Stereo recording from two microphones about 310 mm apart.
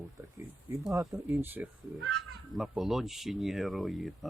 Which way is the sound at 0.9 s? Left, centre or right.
Centre.